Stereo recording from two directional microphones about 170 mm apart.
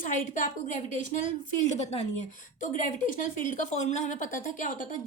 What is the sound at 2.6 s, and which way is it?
A woman's voice, 50° left (ahead or behind).